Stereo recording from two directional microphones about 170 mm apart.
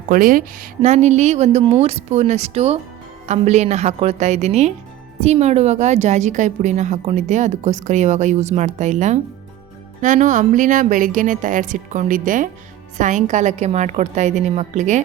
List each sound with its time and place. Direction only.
0.1 s a woman's voice: 55° right (ahead or behind)